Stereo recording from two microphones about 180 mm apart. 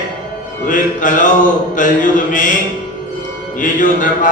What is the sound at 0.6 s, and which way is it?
Mantra, 45° left (ahead or behind).